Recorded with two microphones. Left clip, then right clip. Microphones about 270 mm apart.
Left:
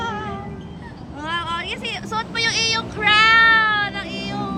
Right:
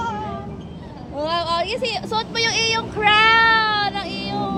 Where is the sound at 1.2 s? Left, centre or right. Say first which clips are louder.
Right 4 dB; centre.